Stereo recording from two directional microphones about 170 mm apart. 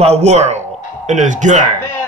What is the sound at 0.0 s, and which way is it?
A man's voice, 40° right (ahead or behind).